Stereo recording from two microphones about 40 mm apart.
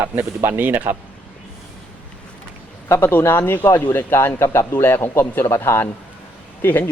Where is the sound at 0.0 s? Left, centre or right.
Right.